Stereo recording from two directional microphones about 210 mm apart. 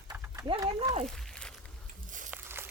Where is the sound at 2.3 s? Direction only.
10° right (ahead or behind).